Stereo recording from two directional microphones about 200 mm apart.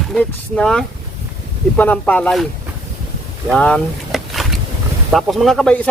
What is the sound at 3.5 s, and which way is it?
Vehicle, 5° left (ahead or behind).